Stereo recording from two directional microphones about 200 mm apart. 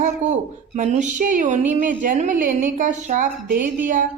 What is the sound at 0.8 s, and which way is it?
A woman's voice, 40° right (ahead or behind).